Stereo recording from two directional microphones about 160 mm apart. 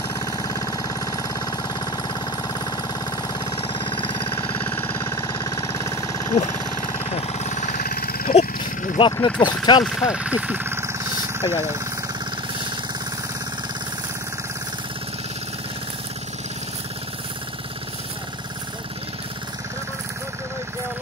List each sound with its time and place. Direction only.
0.1 s engine: 20° left (ahead or behind)
3.2 s a sound: 30° left (ahead or behind)
4.7 s vehicle: 20° left (ahead or behind)
7.0 s engine: 40° left (ahead or behind)
7.8 s a sound: 70° left (ahead or behind)
8.4 s wild animals: 35° left (ahead or behind)
9.1 s speech: 25° left (ahead or behind)
10.0 s vehicle: 5° right (ahead or behind)